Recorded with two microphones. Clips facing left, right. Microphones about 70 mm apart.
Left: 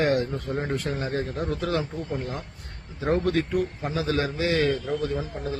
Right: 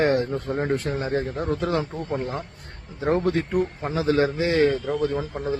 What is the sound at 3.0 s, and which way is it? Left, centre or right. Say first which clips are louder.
A man's voice: right 2 dB; right.